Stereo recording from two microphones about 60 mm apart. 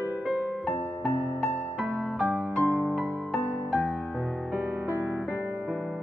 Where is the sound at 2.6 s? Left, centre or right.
Right.